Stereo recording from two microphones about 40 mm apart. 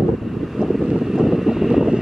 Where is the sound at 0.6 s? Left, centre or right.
Centre.